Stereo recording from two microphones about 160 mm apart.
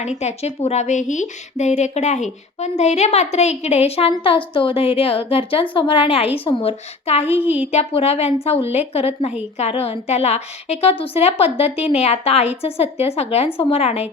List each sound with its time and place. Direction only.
0.2 s a woman's voice: 45° left (ahead or behind)